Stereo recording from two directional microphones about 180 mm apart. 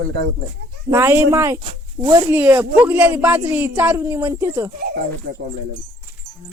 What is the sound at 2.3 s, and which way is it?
Speech, 10° right (ahead or behind).